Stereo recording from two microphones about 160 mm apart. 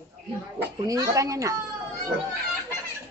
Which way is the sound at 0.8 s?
20° right (ahead or behind).